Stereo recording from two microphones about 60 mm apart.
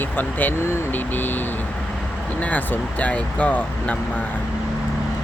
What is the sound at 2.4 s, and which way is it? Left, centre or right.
Speech, left.